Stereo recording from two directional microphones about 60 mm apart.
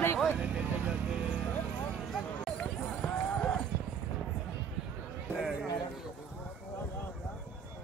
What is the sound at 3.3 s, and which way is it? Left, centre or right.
Clip-clop, centre.